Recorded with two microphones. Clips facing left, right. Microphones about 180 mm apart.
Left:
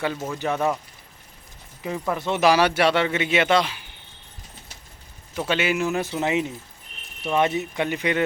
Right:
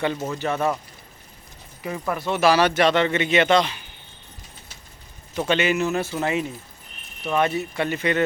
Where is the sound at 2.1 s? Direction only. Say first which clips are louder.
Even; 20° left (ahead or behind).